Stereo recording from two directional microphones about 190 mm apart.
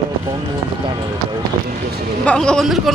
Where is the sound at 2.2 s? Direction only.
5° left (ahead or behind).